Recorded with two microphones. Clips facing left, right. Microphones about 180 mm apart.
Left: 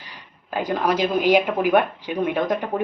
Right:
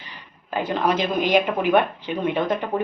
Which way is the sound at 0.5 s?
10° left (ahead or behind).